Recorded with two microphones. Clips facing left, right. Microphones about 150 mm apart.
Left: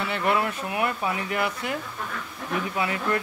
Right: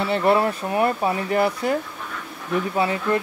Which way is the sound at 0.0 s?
35° right (ahead or behind).